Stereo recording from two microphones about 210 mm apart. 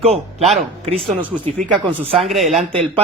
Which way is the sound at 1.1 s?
5° right (ahead or behind).